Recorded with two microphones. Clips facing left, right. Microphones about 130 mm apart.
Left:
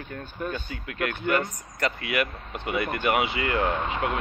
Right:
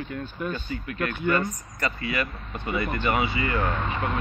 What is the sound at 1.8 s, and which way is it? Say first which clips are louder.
Speech: left 2 dB; 65° left (ahead or behind).